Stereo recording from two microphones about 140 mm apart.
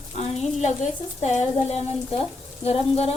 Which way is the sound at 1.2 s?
55° left (ahead or behind).